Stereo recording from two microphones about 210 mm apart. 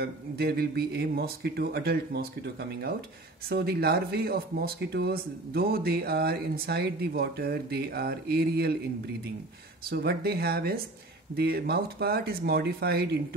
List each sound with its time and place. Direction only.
0.0 s speech: 50° right (ahead or behind)